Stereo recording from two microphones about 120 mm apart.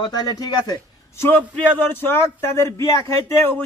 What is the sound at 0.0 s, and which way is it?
Speech, 35° left (ahead or behind).